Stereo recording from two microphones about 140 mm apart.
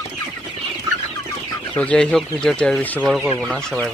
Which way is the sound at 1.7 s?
10° left (ahead or behind).